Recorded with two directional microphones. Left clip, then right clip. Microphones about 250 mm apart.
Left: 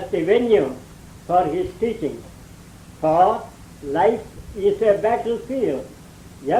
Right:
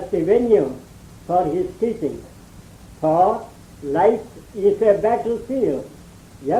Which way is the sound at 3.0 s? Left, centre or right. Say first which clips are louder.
Even; right.